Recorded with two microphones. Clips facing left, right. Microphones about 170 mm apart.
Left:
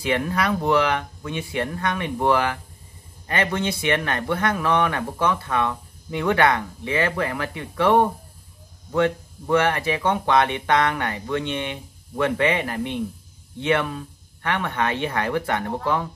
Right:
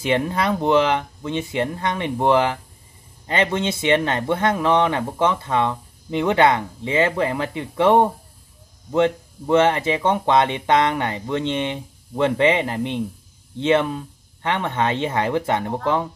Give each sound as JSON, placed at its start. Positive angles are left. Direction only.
{"t": 0.0, "sound": "speech", "side_deg": -25}